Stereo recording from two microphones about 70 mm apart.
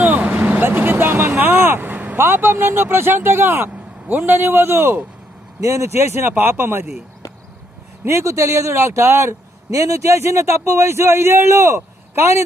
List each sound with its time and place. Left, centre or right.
0.0 s vehicle: right
2.5 s a man's voice: right
5.6 s a man's voice: right
8.0 s a man's voice: right